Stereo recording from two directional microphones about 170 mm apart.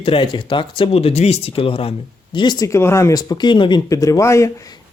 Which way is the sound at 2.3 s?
25° left (ahead or behind).